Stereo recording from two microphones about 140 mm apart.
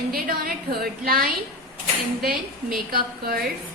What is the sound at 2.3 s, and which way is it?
A woman's voice, 90° right.